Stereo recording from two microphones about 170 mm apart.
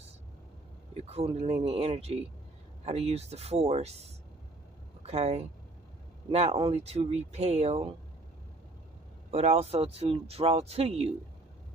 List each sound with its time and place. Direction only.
0.9 s speech: 40° right (ahead or behind)
5.0 s speech: 40° right (ahead or behind)
9.3 s speech: 40° right (ahead or behind)